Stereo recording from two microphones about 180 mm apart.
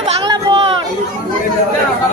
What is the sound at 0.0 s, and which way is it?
Chatter, 25° right (ahead or behind).